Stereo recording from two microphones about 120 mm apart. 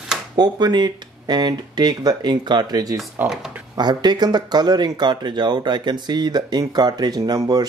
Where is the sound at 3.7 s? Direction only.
35° right (ahead or behind).